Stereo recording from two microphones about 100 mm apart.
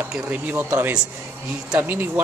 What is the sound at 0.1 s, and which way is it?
Speech, 10° right (ahead or behind).